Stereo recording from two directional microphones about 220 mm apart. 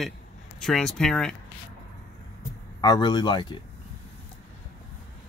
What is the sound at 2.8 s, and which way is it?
Speech, 20° left (ahead or behind).